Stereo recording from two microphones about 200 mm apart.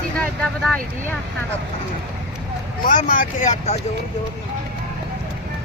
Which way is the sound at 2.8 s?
40° left (ahead or behind).